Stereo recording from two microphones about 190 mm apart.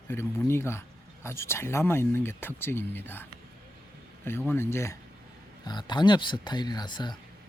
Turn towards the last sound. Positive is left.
turn(degrees=25)  # may be behind; listen again after turning